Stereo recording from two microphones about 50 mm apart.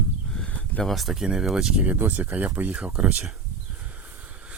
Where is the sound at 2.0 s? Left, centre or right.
Right.